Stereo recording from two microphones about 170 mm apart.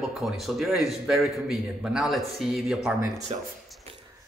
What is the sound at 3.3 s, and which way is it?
Speech, 40° right (ahead or behind).